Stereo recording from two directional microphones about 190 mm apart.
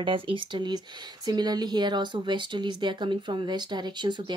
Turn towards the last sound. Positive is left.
turn(degrees=-25)  # may be behind; listen again after turning